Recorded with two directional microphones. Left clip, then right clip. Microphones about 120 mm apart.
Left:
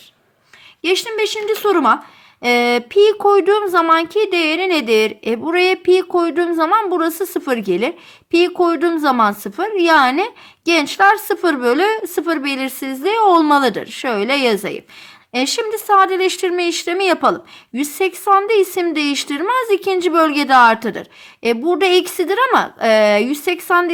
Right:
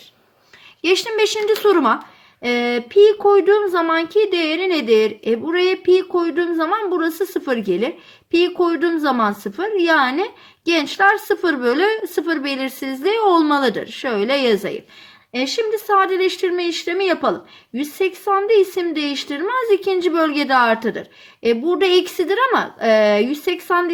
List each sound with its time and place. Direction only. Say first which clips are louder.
0.8 s speech: right 1 dB; 20° left (ahead or behind)
1.6 s speech: left 2 dB; 30° left (ahead or behind)
2.4 s speech: left 5 dB; 55° left (ahead or behind)
15.3 s speech: left 1 dB; 65° left (ahead or behind)